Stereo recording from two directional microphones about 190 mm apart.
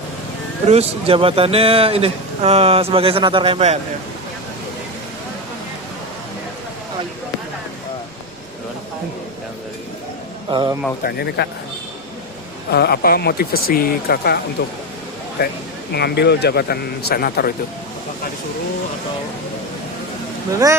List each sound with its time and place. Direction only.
0.7 s a man's voice: 30° right (ahead or behind)
10.5 s a man's voice: 25° right (ahead or behind)
11.0 s speech: 60° left (ahead or behind)
12.7 s speech: 55° left (ahead or behind)
20.5 s speech: 15° right (ahead or behind)